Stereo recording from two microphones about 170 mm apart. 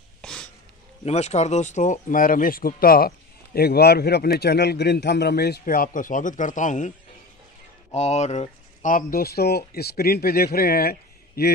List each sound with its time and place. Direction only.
0.2 s a sound: 5° left (ahead or behind)
1.0 s speech: 40° left (ahead or behind)
7.9 s speech: 40° left (ahead or behind); by 11.5 s 65° left (ahead or behind)